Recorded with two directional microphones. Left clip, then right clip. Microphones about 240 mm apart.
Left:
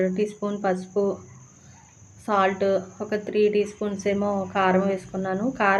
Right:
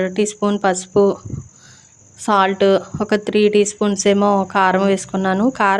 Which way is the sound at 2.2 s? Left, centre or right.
Right.